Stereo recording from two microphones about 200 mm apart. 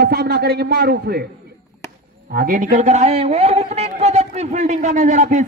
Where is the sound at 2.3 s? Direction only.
40° right (ahead or behind).